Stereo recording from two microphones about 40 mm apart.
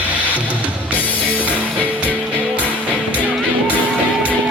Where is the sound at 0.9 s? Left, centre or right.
Left.